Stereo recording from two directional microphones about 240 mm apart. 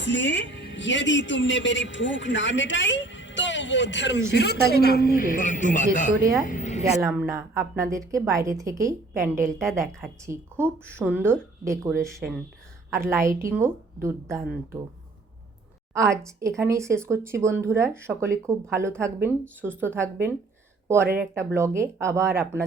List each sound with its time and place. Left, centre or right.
0.0 s a man's voice: left
6.4 s a sound: left
7.0 s a woman's voice: centre
12.9 s a woman's voice: centre
16.0 s a woman's voice: centre